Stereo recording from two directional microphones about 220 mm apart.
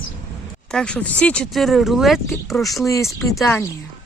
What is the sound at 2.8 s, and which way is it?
Speech, 15° left (ahead or behind).